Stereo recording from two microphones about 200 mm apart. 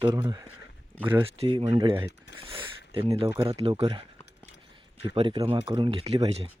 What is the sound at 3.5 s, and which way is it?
Speech, 30° right (ahead or behind).